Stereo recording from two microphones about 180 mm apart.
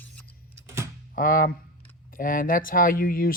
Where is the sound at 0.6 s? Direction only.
15° right (ahead or behind).